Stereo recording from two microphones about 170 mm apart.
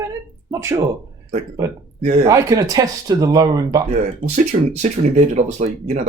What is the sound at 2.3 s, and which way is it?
Speech, 20° right (ahead or behind).